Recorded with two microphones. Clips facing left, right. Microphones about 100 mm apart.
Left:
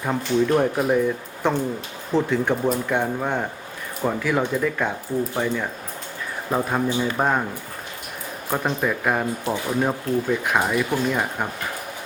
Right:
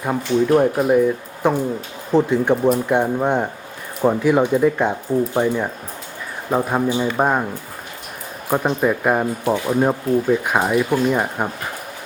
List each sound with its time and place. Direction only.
0.0 s speech: 10° right (ahead or behind)
8.4 s speech: 15° right (ahead or behind)